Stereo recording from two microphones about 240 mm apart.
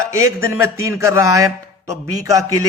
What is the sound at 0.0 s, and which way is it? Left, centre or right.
A man's voice, centre.